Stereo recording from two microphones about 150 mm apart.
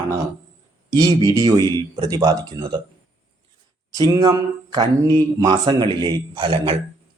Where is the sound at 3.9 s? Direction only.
25° right (ahead or behind).